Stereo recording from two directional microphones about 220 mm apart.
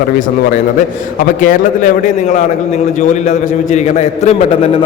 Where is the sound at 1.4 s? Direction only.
35° left (ahead or behind).